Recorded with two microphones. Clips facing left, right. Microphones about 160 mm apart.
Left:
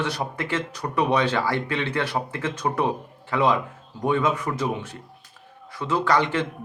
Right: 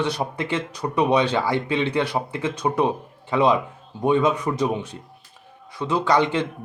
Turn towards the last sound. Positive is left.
turn(degrees=-15)  # may be behind; listen again after turning